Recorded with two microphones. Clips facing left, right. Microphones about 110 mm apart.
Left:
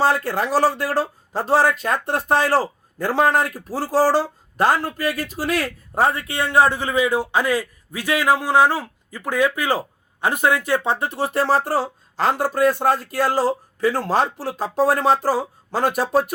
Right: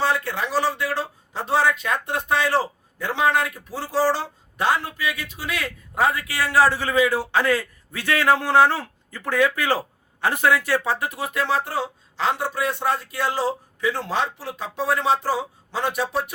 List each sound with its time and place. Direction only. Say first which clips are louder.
0.0 s speech: left 4 dB; 45° left (ahead or behind)